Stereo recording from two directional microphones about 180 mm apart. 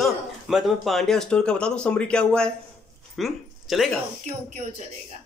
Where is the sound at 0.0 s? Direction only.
Centre (ahead or behind).